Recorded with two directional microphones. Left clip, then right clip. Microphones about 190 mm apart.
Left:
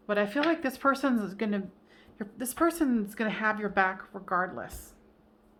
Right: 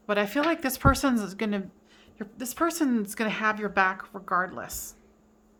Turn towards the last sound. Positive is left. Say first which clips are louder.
# right 1 dB
turn(degrees=-20)  # may be behind; listen again after turning